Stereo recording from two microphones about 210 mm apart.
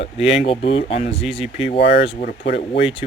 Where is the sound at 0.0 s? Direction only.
30° left (ahead or behind).